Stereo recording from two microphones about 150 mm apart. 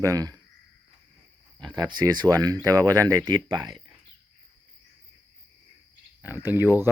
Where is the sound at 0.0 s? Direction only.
20° right (ahead or behind).